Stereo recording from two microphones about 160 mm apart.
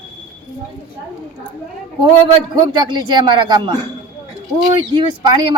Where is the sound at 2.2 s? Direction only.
30° right (ahead or behind).